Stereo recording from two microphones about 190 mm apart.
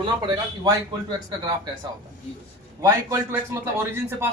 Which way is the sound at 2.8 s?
15° right (ahead or behind).